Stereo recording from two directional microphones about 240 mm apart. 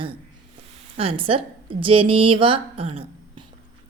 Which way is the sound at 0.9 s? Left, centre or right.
Right.